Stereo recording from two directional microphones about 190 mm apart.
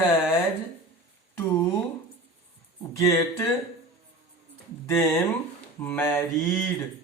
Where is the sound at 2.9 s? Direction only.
15° left (ahead or behind).